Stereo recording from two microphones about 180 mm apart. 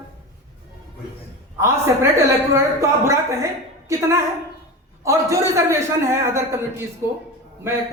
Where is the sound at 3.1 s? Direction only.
15° right (ahead or behind).